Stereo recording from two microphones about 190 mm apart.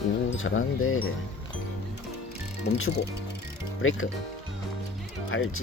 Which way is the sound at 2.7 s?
90° left.